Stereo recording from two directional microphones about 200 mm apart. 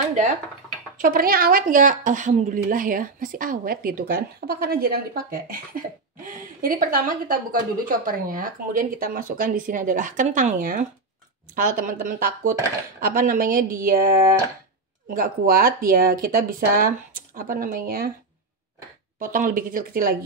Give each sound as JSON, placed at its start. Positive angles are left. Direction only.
{"t": 0.9, "sound": "a woman's voice", "side_deg": -45}
{"t": 15.1, "sound": "a woman's voice", "side_deg": -45}
{"t": 19.1, "sound": "a woman's voice", "side_deg": -40}